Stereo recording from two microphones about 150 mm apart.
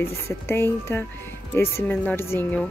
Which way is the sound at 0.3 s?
15° left (ahead or behind).